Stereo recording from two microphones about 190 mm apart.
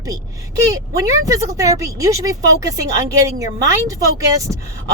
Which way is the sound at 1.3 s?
15° right (ahead or behind).